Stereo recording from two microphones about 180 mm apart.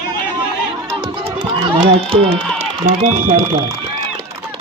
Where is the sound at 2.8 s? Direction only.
45° right (ahead or behind).